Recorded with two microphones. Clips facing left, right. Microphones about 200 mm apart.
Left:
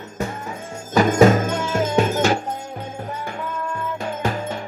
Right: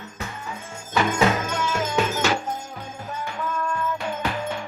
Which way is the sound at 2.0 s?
50° left (ahead or behind).